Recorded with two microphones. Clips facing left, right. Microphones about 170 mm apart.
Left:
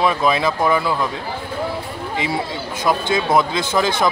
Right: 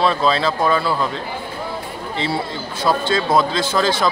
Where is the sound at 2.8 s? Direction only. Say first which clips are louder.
Right 1 dB; 15° left (ahead or behind).